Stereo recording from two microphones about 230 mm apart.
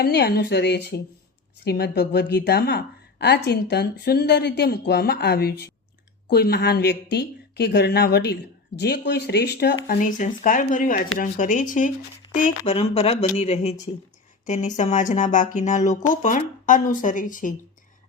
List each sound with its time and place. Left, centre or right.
0.0 s speech: left